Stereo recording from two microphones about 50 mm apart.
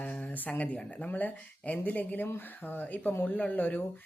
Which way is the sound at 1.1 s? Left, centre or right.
Left.